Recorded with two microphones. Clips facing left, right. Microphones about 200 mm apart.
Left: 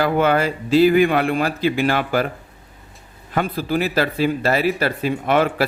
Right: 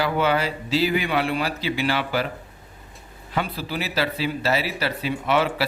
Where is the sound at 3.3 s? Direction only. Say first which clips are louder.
Left 6 dB; 50° left (ahead or behind).